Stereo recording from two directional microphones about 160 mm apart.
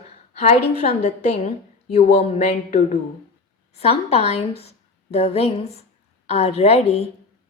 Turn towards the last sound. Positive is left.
turn(degrees=40)  # may be behind; listen again after turning